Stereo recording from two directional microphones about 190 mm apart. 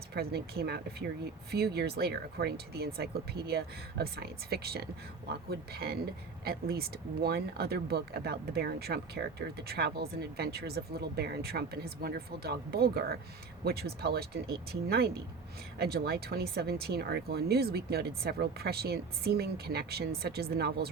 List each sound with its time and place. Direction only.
0.1 s speech: 55° right (ahead or behind)